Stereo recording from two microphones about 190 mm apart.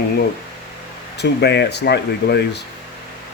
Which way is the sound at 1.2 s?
60° left (ahead or behind).